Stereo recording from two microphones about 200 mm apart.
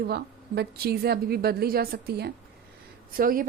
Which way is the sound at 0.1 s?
55° right (ahead or behind).